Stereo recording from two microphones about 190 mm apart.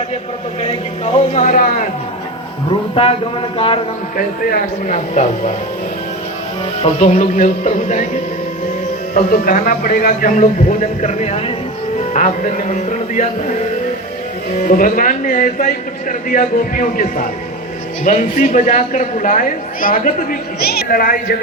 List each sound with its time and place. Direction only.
0.6 s speech: 30° left (ahead or behind)
2.9 s a man's voice: 30° left (ahead or behind)
4.2 s a man's voice: 45° left (ahead or behind)
6.8 s speech: 35° left (ahead or behind)
9.1 s a man's voice: 45° left (ahead or behind)